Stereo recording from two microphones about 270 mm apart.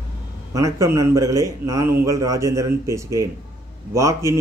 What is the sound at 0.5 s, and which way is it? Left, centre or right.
Speech, centre.